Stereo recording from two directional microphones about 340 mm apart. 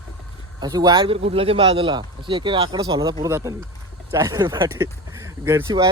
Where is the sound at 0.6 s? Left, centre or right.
Centre.